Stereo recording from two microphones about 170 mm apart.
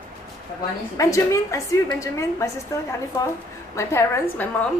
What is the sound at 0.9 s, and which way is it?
A woman's voice, 20° left (ahead or behind).